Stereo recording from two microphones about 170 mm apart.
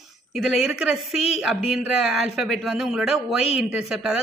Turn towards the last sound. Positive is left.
turn(degrees=-5)  # may be behind; listen again after turning